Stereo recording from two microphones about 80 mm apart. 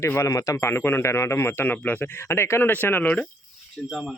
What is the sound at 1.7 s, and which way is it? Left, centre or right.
Speech, left.